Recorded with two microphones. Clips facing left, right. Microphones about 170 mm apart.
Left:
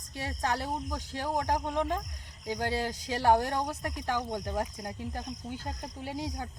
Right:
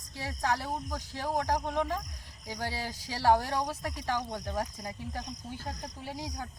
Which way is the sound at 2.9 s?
20° left (ahead or behind).